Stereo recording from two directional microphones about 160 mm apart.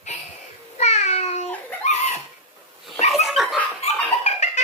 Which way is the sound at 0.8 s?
45° left (ahead or behind).